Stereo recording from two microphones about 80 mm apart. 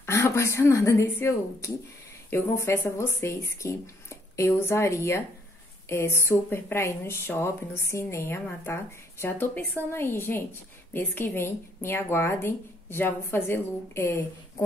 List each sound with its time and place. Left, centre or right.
0.0 s a woman's voice: left